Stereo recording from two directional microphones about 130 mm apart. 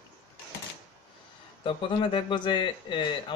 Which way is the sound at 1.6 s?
40° left (ahead or behind).